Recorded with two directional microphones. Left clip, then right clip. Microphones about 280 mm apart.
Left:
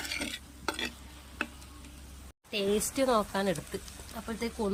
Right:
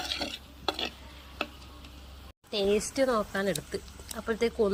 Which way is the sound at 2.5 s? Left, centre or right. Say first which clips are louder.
Right 3 dB; centre.